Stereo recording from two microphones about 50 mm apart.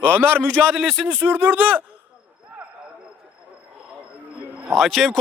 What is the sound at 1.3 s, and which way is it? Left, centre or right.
Speech, right.